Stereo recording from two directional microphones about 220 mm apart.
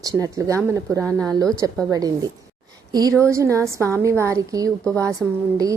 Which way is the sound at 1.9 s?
15° right (ahead or behind).